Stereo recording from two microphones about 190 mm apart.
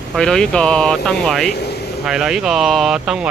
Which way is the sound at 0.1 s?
5° left (ahead or behind).